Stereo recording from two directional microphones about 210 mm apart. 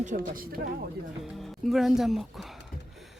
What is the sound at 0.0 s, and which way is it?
Speech, 40° right (ahead or behind).